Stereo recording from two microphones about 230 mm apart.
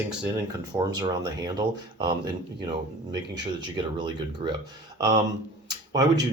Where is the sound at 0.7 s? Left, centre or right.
Centre.